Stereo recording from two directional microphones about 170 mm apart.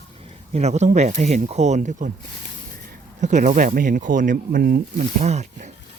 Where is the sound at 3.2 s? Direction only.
45° right (ahead or behind).